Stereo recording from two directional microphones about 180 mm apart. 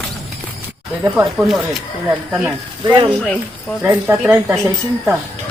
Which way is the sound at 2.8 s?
25° right (ahead or behind).